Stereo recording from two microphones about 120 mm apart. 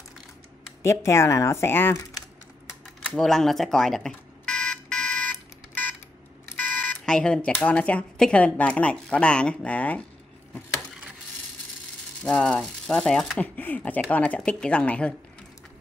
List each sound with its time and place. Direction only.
0.8 s speech: 25° left (ahead or behind)
3.1 s a sound: 5° left (ahead or behind)
7.1 s speech: 5° left (ahead or behind)
12.2 s speech: 10° left (ahead or behind)